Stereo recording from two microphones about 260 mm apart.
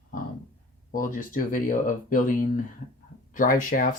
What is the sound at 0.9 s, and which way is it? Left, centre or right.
Speech, left.